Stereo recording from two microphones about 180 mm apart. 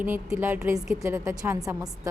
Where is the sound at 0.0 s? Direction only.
15° right (ahead or behind).